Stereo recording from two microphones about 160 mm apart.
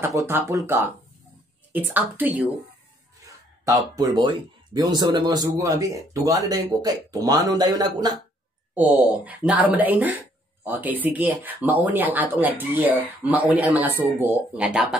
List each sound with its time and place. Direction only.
0.3 s speech: 20° right (ahead or behind)
1.7 s speech: 10° right (ahead or behind)
8.7 s speech: 10° right (ahead or behind)